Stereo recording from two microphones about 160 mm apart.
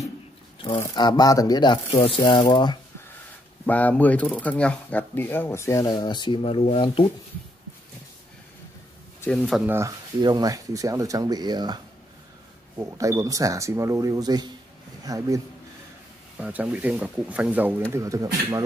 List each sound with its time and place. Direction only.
0.7 s speech: 25° left (ahead or behind)
1.9 s rub: 35° left (ahead or behind)
2.5 s speech: 30° left (ahead or behind)
3.6 s speech: 10° left (ahead or behind); by 7.1 s 35° left (ahead or behind)
9.2 s speech: 5° left (ahead or behind)
9.7 s speech: 20° right (ahead or behind)
16.3 s speech: 10° right (ahead or behind)